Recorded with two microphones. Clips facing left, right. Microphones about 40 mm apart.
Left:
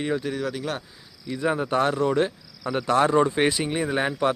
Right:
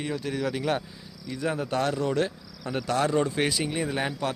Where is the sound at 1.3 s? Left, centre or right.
Left.